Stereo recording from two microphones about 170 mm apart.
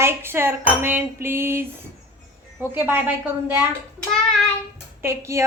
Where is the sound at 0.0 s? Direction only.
15° right (ahead or behind).